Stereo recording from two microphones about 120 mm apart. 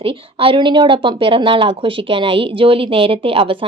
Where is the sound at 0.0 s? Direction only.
50° right (ahead or behind).